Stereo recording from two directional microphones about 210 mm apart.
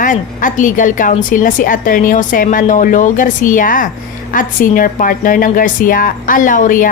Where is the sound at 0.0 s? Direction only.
40° left (ahead or behind).